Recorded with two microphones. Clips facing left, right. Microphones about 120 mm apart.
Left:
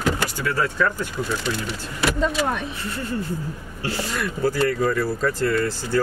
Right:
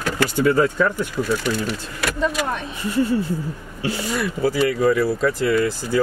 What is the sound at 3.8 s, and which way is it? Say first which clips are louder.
Speech: right 3 dB; 15° right (ahead or behind).